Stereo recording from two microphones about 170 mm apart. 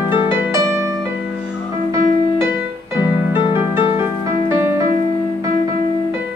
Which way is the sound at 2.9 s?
15° right (ahead or behind).